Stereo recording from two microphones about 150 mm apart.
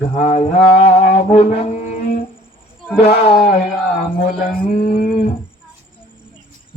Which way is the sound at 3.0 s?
45° left (ahead or behind).